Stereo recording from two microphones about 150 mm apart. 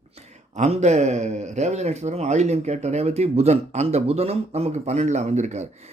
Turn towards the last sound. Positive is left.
turn(degrees=-50)  # may be behind; listen again after turning